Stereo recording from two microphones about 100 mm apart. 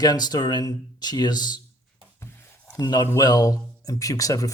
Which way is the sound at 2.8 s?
45° left (ahead or behind).